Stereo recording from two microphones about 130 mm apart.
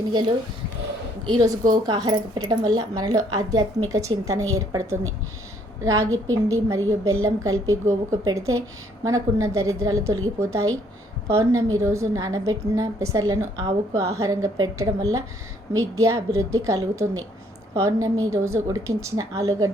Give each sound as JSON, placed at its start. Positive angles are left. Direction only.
{"t": 0.1, "sound": "a woman's voice", "side_deg": -35}